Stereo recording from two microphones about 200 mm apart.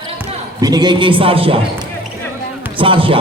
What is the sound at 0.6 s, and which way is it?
A man's voice, 20° right (ahead or behind).